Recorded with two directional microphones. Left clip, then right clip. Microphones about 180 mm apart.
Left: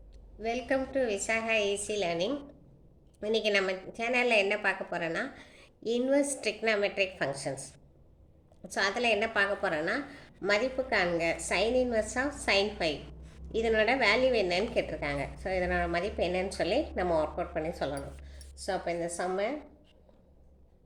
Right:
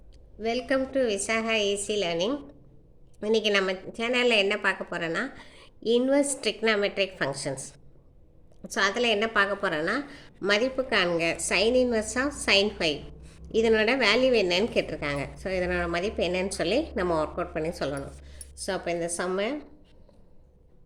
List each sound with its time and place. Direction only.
0.3 s a woman's voice: 35° right (ahead or behind)